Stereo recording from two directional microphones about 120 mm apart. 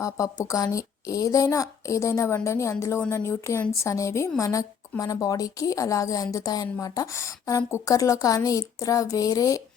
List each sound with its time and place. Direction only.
0.0 s a woman's voice: 25° left (ahead or behind)